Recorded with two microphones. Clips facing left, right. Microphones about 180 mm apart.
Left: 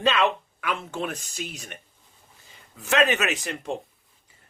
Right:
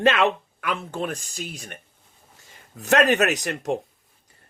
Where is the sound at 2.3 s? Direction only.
80° right.